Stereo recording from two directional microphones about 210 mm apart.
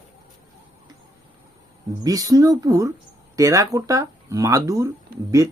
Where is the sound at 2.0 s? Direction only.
15° right (ahead or behind).